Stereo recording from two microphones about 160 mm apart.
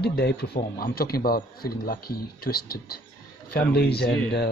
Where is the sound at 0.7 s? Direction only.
70° left (ahead or behind).